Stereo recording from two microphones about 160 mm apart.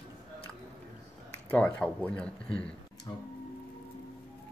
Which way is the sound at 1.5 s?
10° left (ahead or behind).